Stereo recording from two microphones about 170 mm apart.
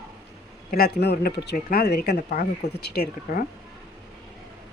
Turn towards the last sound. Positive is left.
turn(degrees=70)  # may be behind; listen again after turning